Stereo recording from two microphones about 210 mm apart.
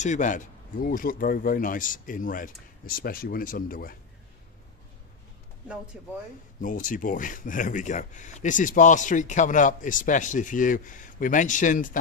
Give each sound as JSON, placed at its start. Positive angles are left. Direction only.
{"t": 0.0, "sound": "speech", "side_deg": 35}
{"t": 5.9, "sound": "speech", "side_deg": 0}
{"t": 6.6, "sound": "speech", "side_deg": 40}